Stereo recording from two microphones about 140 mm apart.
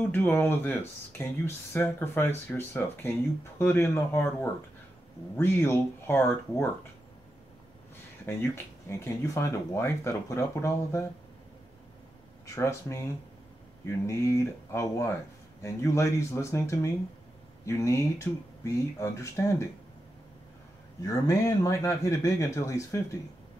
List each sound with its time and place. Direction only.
0.0 s speech: 15° left (ahead or behind)
8.3 s speech: 15° left (ahead or behind)
12.4 s speech: 20° left (ahead or behind)
21.0 s speech: 20° left (ahead or behind)